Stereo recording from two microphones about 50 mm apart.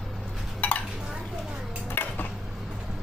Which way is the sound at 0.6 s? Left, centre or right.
Left.